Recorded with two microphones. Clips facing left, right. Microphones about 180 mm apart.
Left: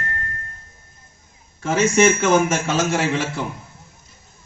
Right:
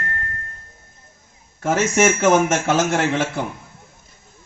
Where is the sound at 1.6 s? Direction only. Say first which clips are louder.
Left 1 dB; 50° right (ahead or behind).